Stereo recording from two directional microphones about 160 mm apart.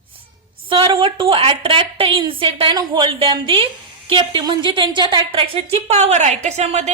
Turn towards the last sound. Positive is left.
turn(degrees=-45)  # may be behind; listen again after turning